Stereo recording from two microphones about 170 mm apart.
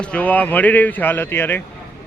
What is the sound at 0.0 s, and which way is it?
Speech, 5° left (ahead or behind).